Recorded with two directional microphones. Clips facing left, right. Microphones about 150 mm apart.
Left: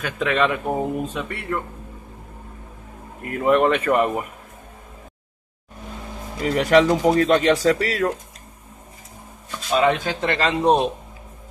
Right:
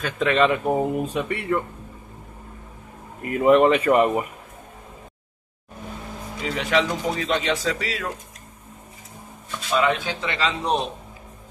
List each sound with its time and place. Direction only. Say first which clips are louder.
0.2 s speech: right 2 dB; centre (ahead or behind)
3.3 s speech: right 2 dB; 5° right (ahead or behind)
6.4 s speech: left 7 dB; 45° left (ahead or behind)
9.8 s speech: left 4 dB; 45° left (ahead or behind)